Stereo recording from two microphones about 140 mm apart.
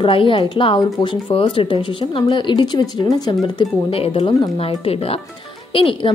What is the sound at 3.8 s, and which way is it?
Speech, 45° left (ahead or behind).